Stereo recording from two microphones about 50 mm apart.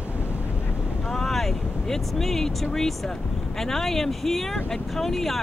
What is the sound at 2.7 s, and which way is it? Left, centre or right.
Speech, centre.